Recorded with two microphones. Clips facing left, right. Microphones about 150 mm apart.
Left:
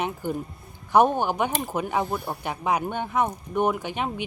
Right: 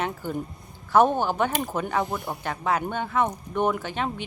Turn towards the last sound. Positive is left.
turn(degrees=15)  # may be behind; listen again after turning